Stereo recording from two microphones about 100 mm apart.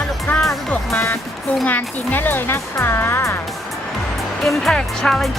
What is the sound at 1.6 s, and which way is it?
Speech, 20° left (ahead or behind).